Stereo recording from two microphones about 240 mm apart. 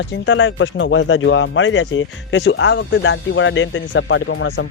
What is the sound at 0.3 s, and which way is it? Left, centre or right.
Speech, left.